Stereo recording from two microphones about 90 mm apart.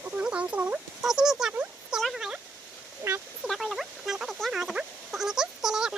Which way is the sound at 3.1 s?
30° right (ahead or behind).